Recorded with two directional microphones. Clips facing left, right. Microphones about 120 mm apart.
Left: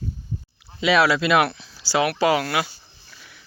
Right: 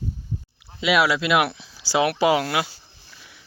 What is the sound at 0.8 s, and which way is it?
Speech, 5° right (ahead or behind).